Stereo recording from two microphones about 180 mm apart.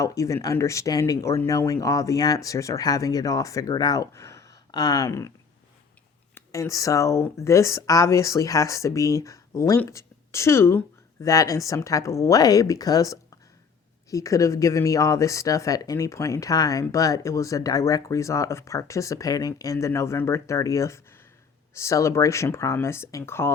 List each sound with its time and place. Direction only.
0.0 s speech: 15° left (ahead or behind)
6.3 s speech: 15° left (ahead or behind)